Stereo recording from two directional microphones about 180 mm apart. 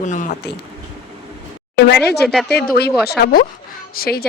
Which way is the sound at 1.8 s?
65° left (ahead or behind).